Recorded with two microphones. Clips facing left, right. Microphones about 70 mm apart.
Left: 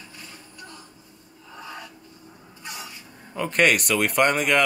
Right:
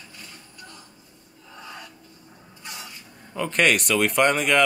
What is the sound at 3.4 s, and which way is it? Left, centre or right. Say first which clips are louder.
Speech: left 1 dB; centre.